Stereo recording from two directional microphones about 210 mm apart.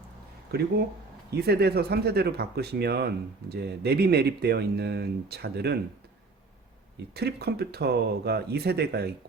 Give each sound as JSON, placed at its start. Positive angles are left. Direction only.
{"t": 0.5, "sound": "speech", "side_deg": -50}
{"t": 6.9, "sound": "speech", "side_deg": -50}